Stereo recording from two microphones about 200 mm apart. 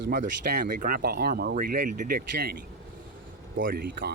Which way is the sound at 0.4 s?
50° right (ahead or behind).